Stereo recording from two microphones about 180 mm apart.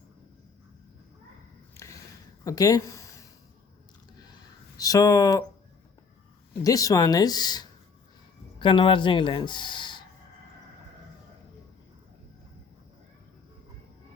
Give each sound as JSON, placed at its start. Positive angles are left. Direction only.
{"t": 1.8, "sound": "a sound", "side_deg": 15}
{"t": 2.4, "sound": "speech", "side_deg": 20}
{"t": 4.8, "sound": "speech", "side_deg": 20}
{"t": 6.6, "sound": "speech", "side_deg": 20}